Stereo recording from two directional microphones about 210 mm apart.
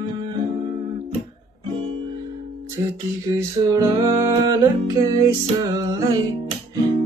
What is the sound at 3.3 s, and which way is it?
Music, 15° right (ahead or behind).